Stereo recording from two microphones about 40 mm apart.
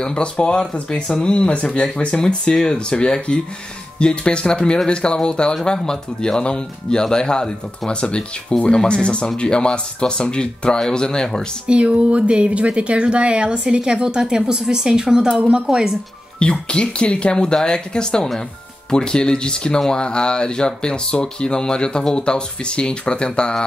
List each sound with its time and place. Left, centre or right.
0.0 s speech: left
11.6 s a woman's voice: right; by 16.0 s centre
16.3 s speech: left